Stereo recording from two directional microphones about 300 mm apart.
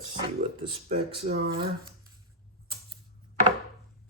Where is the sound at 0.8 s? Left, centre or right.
Right.